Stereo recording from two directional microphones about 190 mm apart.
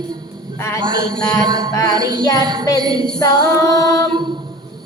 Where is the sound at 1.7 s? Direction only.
20° left (ahead or behind).